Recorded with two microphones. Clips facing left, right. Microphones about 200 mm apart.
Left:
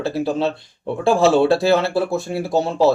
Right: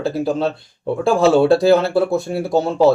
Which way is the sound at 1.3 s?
Centre (ahead or behind).